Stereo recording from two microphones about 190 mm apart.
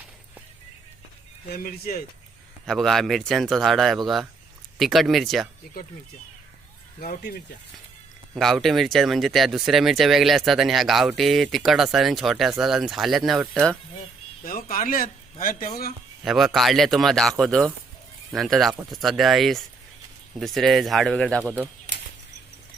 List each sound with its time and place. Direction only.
1.5 s speech: 50° left (ahead or behind)
2.6 s speech: centre (ahead or behind)
7.0 s speech: 55° left (ahead or behind)
8.4 s speech: centre (ahead or behind)
14.4 s speech: 45° left (ahead or behind)
16.2 s speech: centre (ahead or behind)